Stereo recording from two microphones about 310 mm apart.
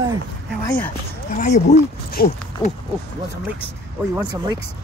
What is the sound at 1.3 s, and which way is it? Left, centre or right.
Speech, left.